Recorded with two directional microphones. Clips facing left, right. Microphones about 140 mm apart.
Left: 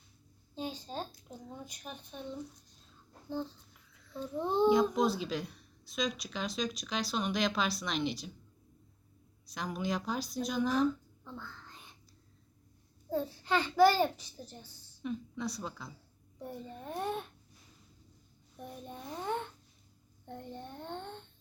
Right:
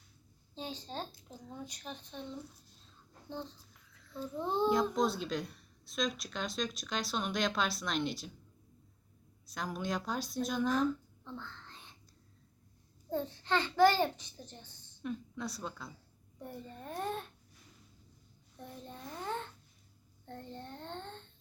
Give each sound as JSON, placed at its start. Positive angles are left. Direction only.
{"t": 0.5, "sound": "a sound", "side_deg": 10}
{"t": 1.5, "sound": "a child's voice", "side_deg": 5}
{"t": 3.9, "sound": "a sound", "side_deg": 0}
{"t": 4.4, "sound": "a child's voice", "side_deg": 15}
{"t": 4.7, "sound": "a woman's voice", "side_deg": 0}
{"t": 9.5, "sound": "speech", "side_deg": 0}
{"t": 13.1, "sound": "a child's voice", "side_deg": 5}
{"t": 16.4, "sound": "a child's voice", "side_deg": 10}
{"t": 18.5, "sound": "a child's voice", "side_deg": 15}